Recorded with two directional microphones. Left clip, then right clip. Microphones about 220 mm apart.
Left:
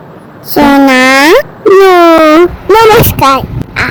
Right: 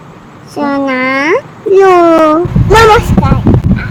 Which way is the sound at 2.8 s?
45° left (ahead or behind).